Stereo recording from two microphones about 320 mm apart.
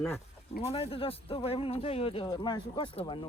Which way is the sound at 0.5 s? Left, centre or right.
Centre.